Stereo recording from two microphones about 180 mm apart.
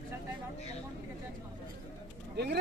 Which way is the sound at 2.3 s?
65° right (ahead or behind).